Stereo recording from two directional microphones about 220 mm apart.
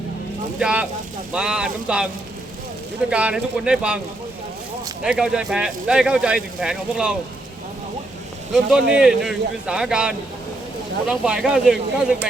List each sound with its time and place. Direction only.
0.6 s speech: 5° right (ahead or behind)
3.1 s speech: 5° right (ahead or behind)
5.0 s speech: 5° right (ahead or behind)
8.5 s speech: 5° right (ahead or behind)